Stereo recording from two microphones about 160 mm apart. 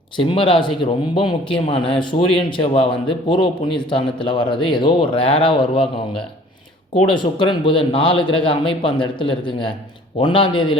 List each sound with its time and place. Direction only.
0.2 s a man's voice: 35° left (ahead or behind)
7.1 s a man's voice: 30° left (ahead or behind)